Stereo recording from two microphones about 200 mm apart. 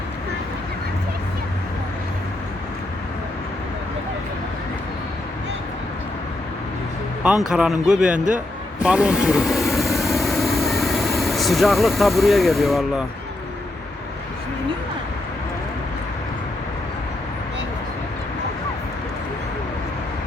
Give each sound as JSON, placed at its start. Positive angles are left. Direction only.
{"t": 7.4, "sound": "speech", "side_deg": -5}
{"t": 8.1, "sound": "a man's voice", "side_deg": -40}
{"t": 8.8, "sound": "vehicle", "side_deg": -5}